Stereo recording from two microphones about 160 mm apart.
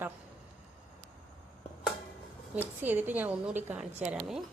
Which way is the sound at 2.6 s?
10° right (ahead or behind).